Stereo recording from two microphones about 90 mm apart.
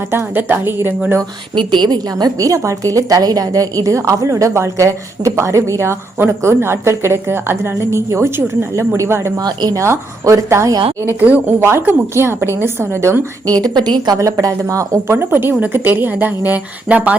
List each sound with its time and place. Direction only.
0.1 s speech: 25° right (ahead or behind)
1.5 s a woman's voice: 60° right (ahead or behind); by 9.3 s 30° right (ahead or behind)
9.4 s a woman's voice: 50° right (ahead or behind)
9.7 s a woman's voice: 35° right (ahead or behind)
11.0 s speech: 20° right (ahead or behind)
13.5 s a woman's voice: 50° right (ahead or behind)
14.2 s speech: 40° right (ahead or behind); by 17.2 s 15° right (ahead or behind)